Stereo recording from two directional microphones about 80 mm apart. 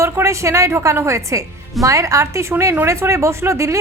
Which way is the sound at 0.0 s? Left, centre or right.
Right.